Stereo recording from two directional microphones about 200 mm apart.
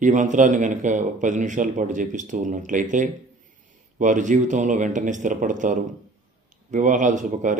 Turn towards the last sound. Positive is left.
turn(degrees=-40)  # may be behind; listen again after turning